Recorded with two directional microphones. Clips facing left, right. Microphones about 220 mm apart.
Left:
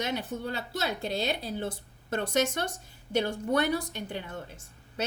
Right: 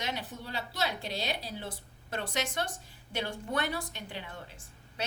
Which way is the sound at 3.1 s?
45° left (ahead or behind).